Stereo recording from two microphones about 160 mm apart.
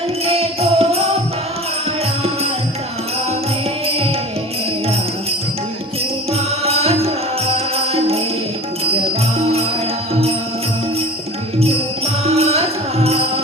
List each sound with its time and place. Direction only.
0.3 s music: 40° right (ahead or behind)
3.8 s music: 35° right (ahead or behind)
6.3 s music: 40° right (ahead or behind)
12.2 s music: 40° right (ahead or behind)